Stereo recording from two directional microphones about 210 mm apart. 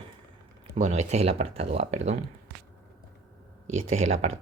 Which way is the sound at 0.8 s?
35° right (ahead or behind).